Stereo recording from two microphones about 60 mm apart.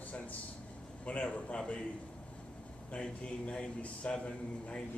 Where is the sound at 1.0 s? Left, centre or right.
Left.